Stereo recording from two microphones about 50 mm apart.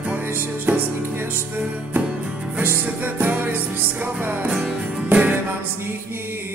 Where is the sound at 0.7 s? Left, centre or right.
Right.